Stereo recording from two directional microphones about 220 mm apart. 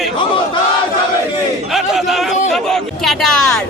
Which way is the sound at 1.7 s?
Centre (ahead or behind).